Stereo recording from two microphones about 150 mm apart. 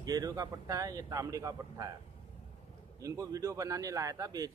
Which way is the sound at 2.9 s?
20° right (ahead or behind).